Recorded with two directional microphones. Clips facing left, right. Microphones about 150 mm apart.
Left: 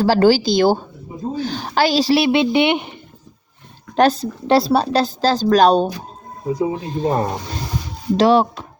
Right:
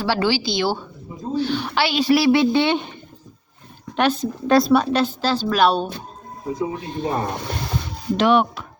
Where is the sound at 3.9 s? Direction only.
35° left (ahead or behind).